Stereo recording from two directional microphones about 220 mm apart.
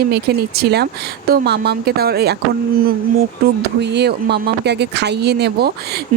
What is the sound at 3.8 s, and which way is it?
Speech, 50° right (ahead or behind).